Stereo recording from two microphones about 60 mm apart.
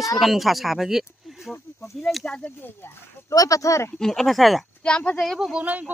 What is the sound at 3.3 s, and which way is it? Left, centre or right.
Speech, left.